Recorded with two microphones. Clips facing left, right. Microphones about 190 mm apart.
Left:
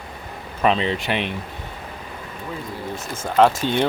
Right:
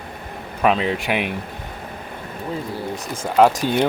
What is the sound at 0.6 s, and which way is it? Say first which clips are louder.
Speech: right 1 dB; 5° right (ahead or behind).